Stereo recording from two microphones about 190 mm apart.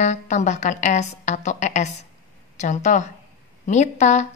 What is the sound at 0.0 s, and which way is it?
A woman's voice, 40° left (ahead or behind).